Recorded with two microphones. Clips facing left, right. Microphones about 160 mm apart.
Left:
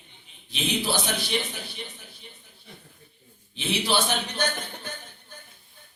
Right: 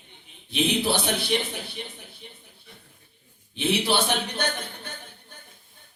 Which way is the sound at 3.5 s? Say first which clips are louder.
Right 2 dB; 60° right (ahead or behind).